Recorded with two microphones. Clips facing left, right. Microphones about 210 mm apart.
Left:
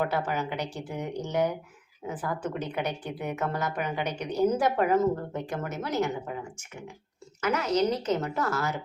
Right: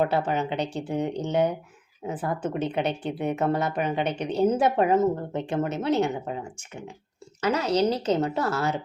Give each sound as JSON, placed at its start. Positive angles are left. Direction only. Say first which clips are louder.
{"t": 0.0, "sound": "speech", "louder": "right 4 dB", "side_deg": -25}